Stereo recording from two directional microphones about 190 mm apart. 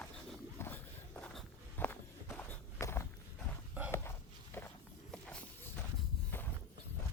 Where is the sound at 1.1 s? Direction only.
5° left (ahead or behind).